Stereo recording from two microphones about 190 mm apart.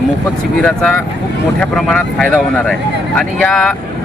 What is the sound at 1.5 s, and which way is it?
Speech, 5° left (ahead or behind).